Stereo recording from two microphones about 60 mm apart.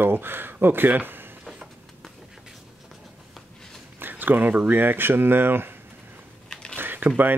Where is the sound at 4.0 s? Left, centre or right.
Right.